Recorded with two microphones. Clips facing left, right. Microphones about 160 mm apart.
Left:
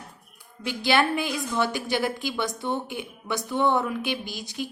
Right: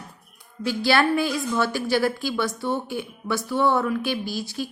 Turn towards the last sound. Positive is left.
turn(degrees=20)  # may be behind; listen again after turning